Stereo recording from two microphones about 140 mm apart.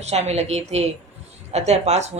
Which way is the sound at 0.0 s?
50° right (ahead or behind).